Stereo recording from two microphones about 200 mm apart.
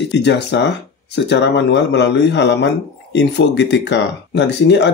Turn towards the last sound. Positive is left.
turn(degrees=60)  # may be behind; listen again after turning